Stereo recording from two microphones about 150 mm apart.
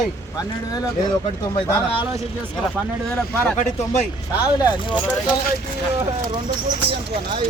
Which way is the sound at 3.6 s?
45° left (ahead or behind).